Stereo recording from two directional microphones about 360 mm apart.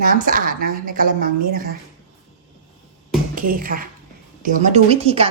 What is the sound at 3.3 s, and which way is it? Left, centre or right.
A woman's voice, right.